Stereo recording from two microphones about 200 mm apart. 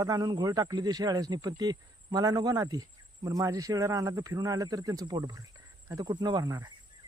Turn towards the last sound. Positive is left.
turn(degrees=-20)  # may be behind; listen again after turning